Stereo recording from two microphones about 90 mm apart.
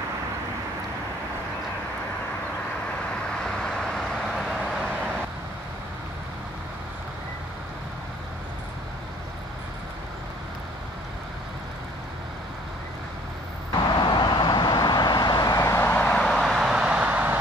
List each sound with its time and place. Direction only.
3.4 s vehicle: 5° left (ahead or behind)
13.9 s vehicle: 60° left (ahead or behind); by 15.8 s 40° left (ahead or behind)
15.8 s vehicle: 15° left (ahead or behind)
16.3 s vehicle: centre (ahead or behind); by 17.4 s 15° right (ahead or behind)